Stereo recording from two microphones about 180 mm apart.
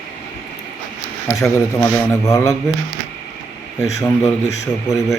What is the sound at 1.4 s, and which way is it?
Speech, 15° left (ahead or behind).